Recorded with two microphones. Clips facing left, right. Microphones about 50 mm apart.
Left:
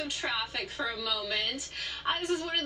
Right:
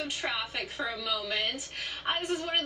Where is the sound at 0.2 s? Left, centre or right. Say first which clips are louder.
Left 1 dB; centre.